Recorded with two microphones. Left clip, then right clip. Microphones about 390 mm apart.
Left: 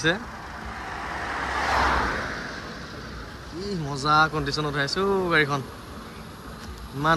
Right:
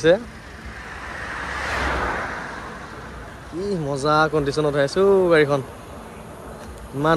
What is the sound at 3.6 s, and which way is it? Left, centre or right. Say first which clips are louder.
Speech: right 5 dB; centre.